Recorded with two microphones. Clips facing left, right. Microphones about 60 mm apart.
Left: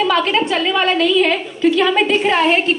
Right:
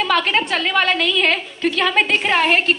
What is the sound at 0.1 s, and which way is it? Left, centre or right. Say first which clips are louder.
A woman's voice: left 2 dB; right.